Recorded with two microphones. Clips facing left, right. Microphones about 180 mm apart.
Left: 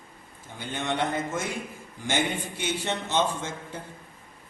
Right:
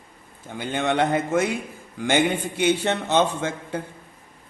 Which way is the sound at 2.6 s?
65° right (ahead or behind).